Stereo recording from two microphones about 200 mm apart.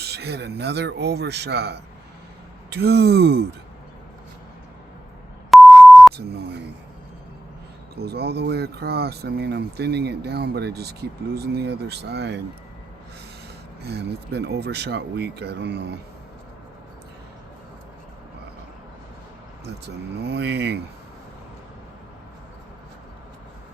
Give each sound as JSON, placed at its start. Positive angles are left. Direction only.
{"t": 0.0, "sound": "speech", "side_deg": -55}
{"t": 5.5, "sound": "beep", "side_deg": 0}
{"t": 7.9, "sound": "speech", "side_deg": -55}
{"t": 13.8, "sound": "speech", "side_deg": -55}
{"t": 19.6, "sound": "speech", "side_deg": -55}